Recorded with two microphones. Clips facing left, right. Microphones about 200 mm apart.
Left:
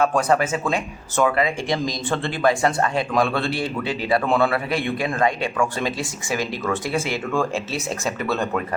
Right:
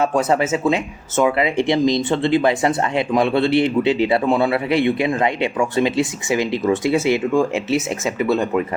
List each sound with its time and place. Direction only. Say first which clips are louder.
0.0 s speech: right 2 dB; 25° right (ahead or behind)